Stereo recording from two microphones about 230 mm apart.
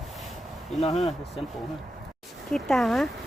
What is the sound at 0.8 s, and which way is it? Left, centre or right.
Speech, left.